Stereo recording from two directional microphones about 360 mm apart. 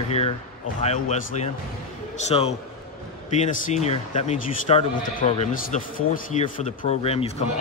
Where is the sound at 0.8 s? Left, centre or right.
Centre.